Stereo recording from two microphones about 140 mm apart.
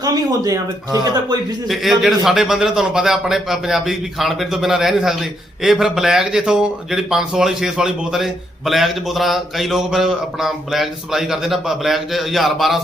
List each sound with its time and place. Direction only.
0.0 s speech: 25° right (ahead or behind)
1.6 s speech: centre (ahead or behind)